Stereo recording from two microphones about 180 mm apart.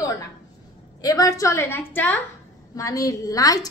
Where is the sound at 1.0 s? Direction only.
20° left (ahead or behind).